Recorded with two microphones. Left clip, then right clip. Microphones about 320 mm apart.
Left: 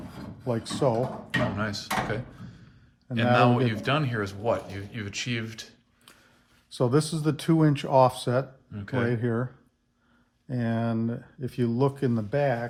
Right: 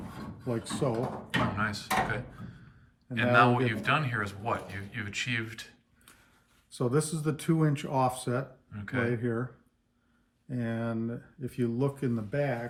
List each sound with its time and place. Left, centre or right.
0.4 s speech: centre
1.3 s speech: centre
3.3 s speech: centre
6.7 s speech: left
8.7 s speech: centre
9.1 s speech: left
10.5 s speech: left